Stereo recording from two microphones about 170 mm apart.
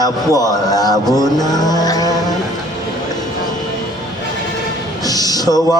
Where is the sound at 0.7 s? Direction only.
25° left (ahead or behind).